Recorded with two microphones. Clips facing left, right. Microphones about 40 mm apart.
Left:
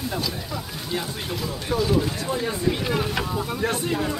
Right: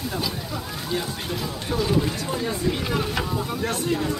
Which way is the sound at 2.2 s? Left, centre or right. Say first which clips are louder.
Left 1 dB; centre.